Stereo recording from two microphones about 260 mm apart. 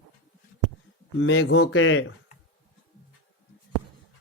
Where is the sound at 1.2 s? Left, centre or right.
Left.